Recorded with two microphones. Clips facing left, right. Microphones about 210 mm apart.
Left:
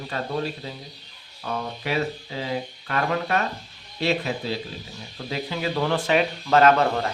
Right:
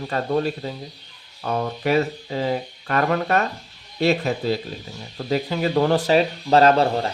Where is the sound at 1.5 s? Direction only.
45° right (ahead or behind).